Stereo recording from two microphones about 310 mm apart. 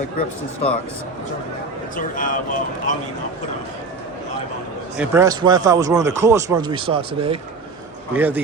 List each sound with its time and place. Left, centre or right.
2.0 s speech: left
4.9 s speech: centre
8.1 s a man's voice: centre